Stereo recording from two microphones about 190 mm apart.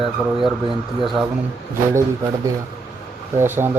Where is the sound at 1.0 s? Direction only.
Centre (ahead or behind).